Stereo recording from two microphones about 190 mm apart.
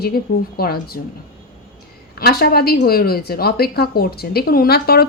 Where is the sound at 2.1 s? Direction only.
55° left (ahead or behind).